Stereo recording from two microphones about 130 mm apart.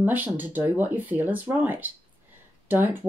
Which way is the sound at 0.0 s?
15° right (ahead or behind).